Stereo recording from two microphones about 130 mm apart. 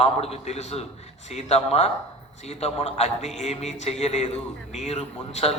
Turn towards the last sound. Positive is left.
turn(degrees=50)  # may be behind; listen again after turning